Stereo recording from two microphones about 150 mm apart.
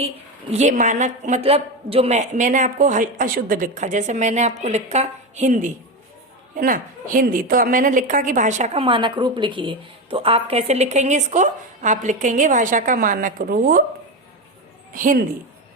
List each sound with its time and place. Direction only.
0.5 s a woman's voice: 55° right (ahead or behind)
6.6 s a woman's voice: 65° right (ahead or behind)
14.9 s a woman's voice: 65° right (ahead or behind)